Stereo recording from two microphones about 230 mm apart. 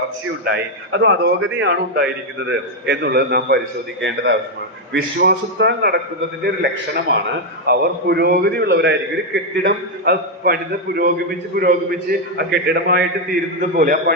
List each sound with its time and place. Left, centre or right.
0.4 s a man's voice: right